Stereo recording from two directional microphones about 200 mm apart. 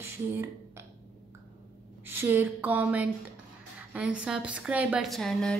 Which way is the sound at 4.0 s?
5° right (ahead or behind).